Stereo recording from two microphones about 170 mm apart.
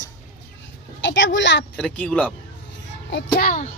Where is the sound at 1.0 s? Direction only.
90° left.